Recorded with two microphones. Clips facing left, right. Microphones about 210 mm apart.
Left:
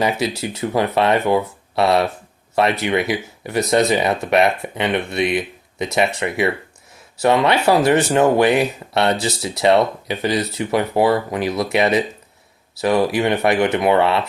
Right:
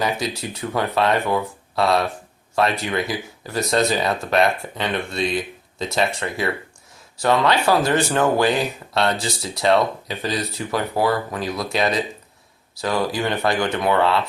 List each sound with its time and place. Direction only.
0.0 s speech: 25° left (ahead or behind)